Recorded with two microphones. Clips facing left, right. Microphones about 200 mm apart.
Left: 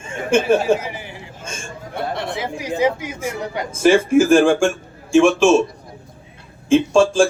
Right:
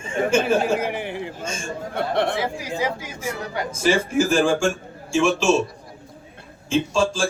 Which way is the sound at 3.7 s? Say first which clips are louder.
Left 8 dB; 55° left (ahead or behind).